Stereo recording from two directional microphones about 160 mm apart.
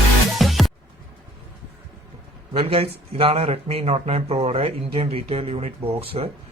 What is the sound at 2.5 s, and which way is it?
A man's voice, 35° right (ahead or behind).